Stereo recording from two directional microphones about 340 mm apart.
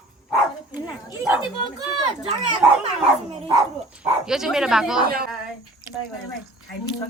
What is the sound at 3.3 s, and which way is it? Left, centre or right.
Dog, centre.